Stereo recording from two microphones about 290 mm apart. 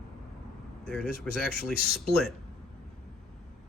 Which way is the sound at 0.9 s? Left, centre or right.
Centre.